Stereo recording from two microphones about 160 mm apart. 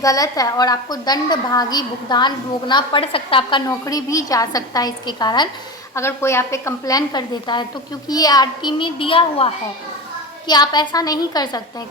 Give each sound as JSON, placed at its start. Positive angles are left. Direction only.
{"t": 0.0, "sound": "a woman's voice", "side_deg": 20}
{"t": 3.7, "sound": "a woman's voice", "side_deg": 20}